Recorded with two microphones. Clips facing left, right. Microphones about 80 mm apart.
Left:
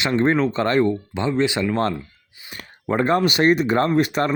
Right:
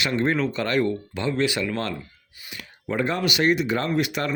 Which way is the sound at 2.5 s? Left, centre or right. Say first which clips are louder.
Left 5 dB; left.